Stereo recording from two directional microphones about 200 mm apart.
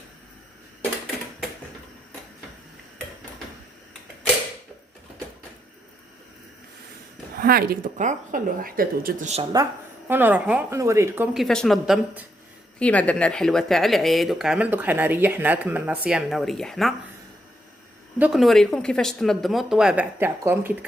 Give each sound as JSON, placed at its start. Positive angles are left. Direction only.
{"t": 7.3, "sound": "speech", "side_deg": -50}
{"t": 10.1, "sound": "speech", "side_deg": -10}
{"t": 11.4, "sound": "speech", "side_deg": 5}
{"t": 18.2, "sound": "speech", "side_deg": 0}